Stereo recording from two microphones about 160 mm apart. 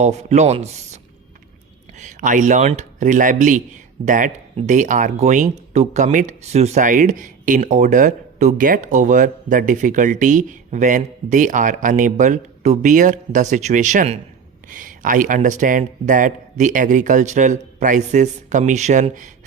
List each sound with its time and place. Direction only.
0.0 s speech: 45° right (ahead or behind)
2.0 s speech: 50° right (ahead or behind)